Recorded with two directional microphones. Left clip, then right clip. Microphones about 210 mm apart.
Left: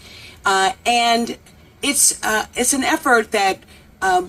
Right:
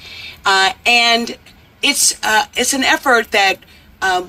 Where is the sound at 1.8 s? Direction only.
55° left (ahead or behind).